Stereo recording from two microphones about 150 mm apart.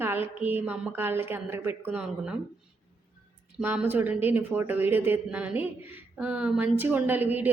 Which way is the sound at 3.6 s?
10° right (ahead or behind).